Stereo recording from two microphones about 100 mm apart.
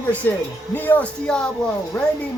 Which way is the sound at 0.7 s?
20° left (ahead or behind).